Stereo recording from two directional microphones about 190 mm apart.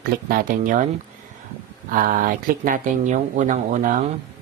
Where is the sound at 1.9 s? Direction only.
45° right (ahead or behind).